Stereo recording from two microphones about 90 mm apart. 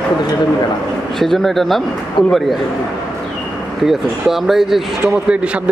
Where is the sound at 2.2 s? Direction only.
60° left (ahead or behind).